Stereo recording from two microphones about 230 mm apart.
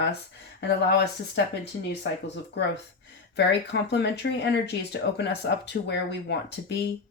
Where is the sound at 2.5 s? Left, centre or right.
Left.